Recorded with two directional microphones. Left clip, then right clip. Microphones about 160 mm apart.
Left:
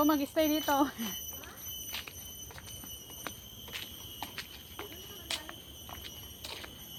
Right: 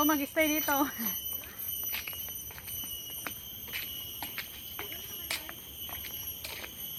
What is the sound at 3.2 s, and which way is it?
Squeal, 10° right (ahead or behind).